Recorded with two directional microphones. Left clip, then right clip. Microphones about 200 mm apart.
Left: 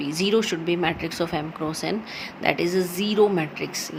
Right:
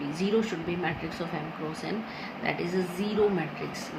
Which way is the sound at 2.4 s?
55° left (ahead or behind).